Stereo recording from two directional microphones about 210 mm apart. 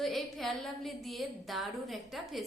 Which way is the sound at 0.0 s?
Centre (ahead or behind).